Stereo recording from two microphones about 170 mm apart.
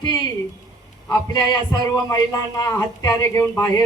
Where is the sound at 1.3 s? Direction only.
25° left (ahead or behind).